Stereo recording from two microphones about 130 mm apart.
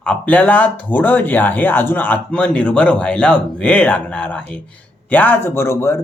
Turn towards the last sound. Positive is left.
turn(degrees=20)  # may be behind; listen again after turning